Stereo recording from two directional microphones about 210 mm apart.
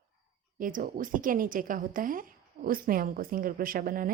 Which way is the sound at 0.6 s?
40° right (ahead or behind).